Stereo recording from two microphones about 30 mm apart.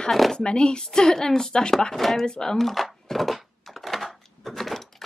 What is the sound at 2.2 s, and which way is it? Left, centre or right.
Speech, left.